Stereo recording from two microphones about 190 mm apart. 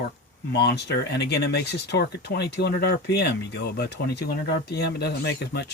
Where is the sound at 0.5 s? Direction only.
60° left (ahead or behind).